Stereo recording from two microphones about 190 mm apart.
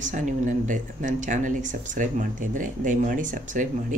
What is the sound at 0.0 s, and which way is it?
Speech, 40° right (ahead or behind).